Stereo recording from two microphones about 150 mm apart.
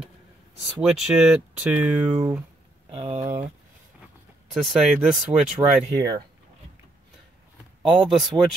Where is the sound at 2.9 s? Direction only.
40° right (ahead or behind).